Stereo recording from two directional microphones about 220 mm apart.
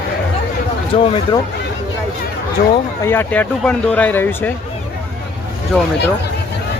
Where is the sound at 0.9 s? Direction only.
30° left (ahead or behind).